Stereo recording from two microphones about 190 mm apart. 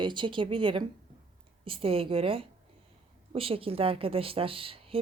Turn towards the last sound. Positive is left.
turn(degrees=-30)  # may be behind; listen again after turning